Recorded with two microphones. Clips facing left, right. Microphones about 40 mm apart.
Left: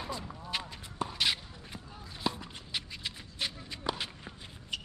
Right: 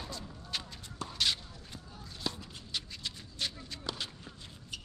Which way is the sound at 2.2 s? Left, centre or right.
Centre.